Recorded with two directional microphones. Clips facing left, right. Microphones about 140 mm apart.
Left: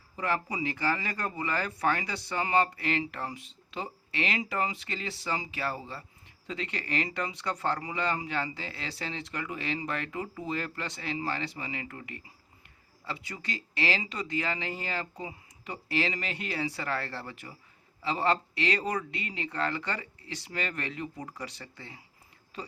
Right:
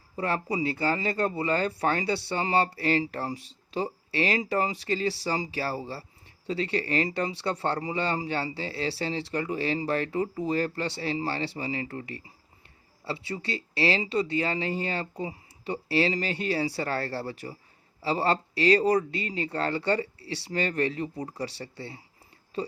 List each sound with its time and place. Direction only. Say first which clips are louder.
0.2 s speech: right 3 dB; 30° right (ahead or behind)